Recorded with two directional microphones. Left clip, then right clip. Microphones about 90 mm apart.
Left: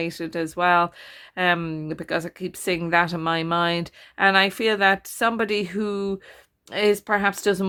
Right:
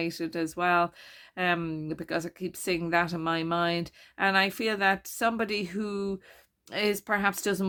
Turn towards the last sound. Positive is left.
turn(degrees=20)  # may be behind; listen again after turning